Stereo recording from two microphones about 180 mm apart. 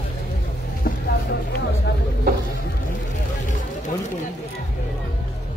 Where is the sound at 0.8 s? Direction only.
55° left (ahead or behind).